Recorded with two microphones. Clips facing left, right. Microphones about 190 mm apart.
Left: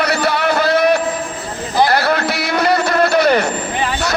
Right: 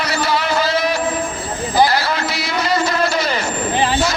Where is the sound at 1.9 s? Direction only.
60° left (ahead or behind).